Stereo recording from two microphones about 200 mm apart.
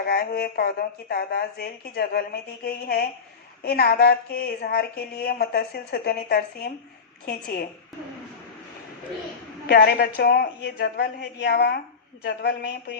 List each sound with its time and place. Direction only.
0.0 s speech: 50° left (ahead or behind)
9.6 s speech: 50° left (ahead or behind)